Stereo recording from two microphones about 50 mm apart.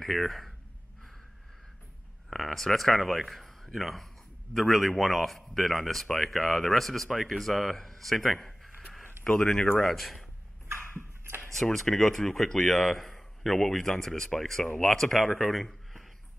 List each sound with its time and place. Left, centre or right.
0.0 s speech: centre
2.2 s a man's voice: centre
9.2 s speech: centre
9.8 s a man's voice: centre
11.0 s a sound: right
11.6 s a man's voice: centre